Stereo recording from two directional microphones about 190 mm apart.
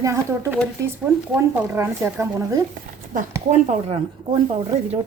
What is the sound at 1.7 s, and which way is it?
Speech, 15° right (ahead or behind).